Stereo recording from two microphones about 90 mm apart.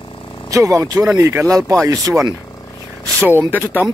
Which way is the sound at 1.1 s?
25° right (ahead or behind).